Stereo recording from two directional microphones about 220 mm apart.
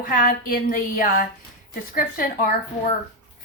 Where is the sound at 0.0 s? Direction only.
40° left (ahead or behind).